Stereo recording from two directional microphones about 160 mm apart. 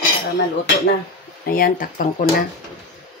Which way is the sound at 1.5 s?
60° left (ahead or behind).